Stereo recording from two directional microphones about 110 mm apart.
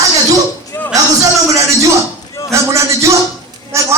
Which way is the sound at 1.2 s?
30° right (ahead or behind).